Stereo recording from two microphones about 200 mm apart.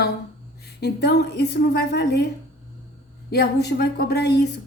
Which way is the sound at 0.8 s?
55° left (ahead or behind).